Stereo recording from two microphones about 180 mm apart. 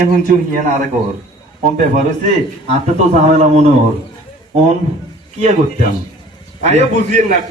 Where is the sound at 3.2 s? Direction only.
35° right (ahead or behind).